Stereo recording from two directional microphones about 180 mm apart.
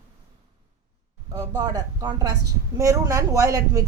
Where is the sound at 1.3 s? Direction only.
20° right (ahead or behind).